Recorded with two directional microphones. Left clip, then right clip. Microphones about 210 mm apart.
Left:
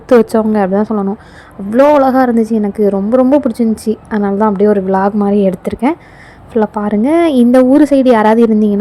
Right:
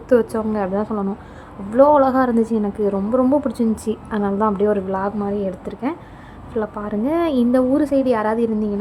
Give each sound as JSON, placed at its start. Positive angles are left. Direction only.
{"t": 0.1, "sound": "a woman's voice", "side_deg": 25}